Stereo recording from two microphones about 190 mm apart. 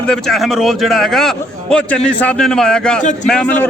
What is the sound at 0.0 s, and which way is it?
A man's voice, 5° left (ahead or behind).